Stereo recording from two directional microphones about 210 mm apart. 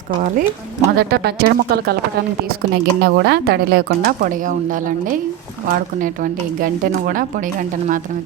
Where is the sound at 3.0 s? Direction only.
50° right (ahead or behind).